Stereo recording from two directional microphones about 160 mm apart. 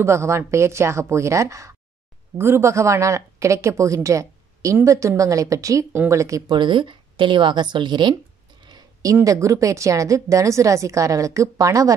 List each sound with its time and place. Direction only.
0.0 s a woman's voice: 15° right (ahead or behind)
8.6 s a sound: 25° right (ahead or behind)
9.1 s a woman's voice: 20° right (ahead or behind)